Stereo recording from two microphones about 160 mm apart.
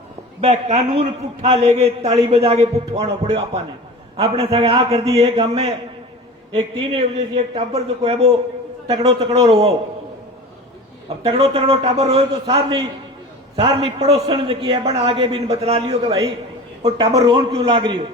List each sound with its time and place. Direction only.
0.4 s a man's voice: 45° right (ahead or behind)
4.2 s a man's voice: 40° right (ahead or behind)
11.2 s a man's voice: 40° right (ahead or behind)